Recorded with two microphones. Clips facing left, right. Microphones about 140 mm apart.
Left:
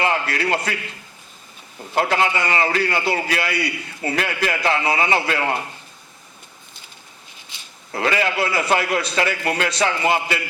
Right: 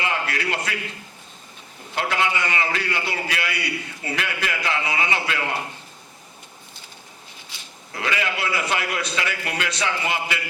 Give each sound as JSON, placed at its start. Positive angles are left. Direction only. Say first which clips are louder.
{"t": 0.0, "sound": "a man's voice", "louder": "left 5 dB", "side_deg": 40}
{"t": 2.0, "sound": "a man's voice", "louder": "left 4 dB", "side_deg": 40}
{"t": 7.5, "sound": "a sound", "louder": "left 1 dB", "side_deg": 20}
{"t": 7.9, "sound": "a man's voice", "louder": "left 6 dB", "side_deg": 40}